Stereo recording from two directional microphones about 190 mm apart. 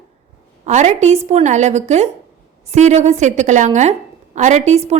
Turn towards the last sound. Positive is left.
turn(degrees=-35)  # may be behind; listen again after turning